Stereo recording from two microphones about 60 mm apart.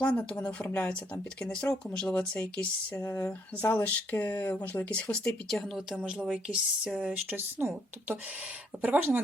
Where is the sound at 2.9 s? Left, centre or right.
Left.